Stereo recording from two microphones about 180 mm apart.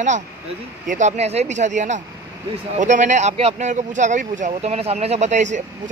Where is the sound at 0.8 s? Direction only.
40° right (ahead or behind).